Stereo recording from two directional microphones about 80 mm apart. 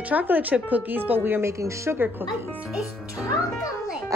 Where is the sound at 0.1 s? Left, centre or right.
Right.